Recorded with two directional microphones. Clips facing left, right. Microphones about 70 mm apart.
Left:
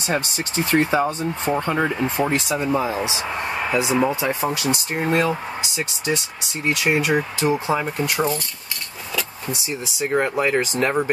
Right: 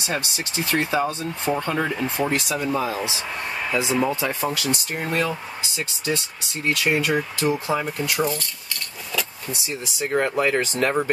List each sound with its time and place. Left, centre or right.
0.0 s speech: left
9.9 s speech: centre